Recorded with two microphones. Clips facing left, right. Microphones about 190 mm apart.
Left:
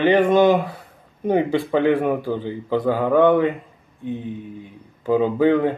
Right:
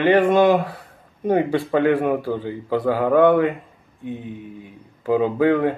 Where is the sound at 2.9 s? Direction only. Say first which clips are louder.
Right 1 dB; 10° right (ahead or behind).